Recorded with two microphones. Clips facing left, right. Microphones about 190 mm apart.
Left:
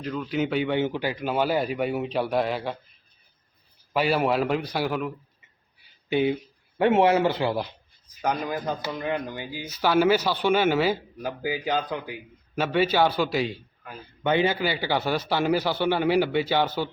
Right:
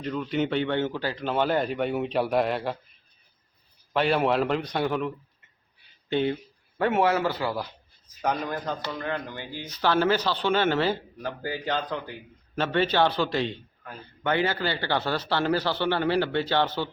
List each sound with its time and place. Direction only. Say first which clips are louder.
0.0 s speech: even; centre (ahead or behind)
3.9 s speech: even; 5° left (ahead or behind)
6.7 s speech: left 4 dB; 20° left (ahead or behind)
8.0 s speech: left 1 dB; centre (ahead or behind)